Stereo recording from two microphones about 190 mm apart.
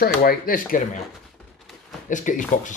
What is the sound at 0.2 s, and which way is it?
Speech, 50° left (ahead or behind).